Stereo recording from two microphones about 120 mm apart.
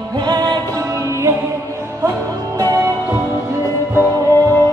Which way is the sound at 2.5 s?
30° right (ahead or behind).